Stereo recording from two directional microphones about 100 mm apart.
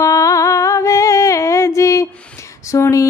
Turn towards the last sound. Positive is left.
turn(degrees=30)  # may be behind; listen again after turning